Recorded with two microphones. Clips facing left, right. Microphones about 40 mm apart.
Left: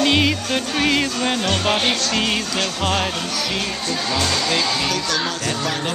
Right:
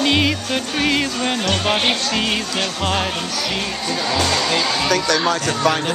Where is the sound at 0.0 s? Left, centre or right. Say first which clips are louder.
Even; centre.